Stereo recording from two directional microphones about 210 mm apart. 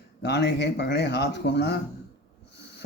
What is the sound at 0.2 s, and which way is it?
Speech, 55° left (ahead or behind).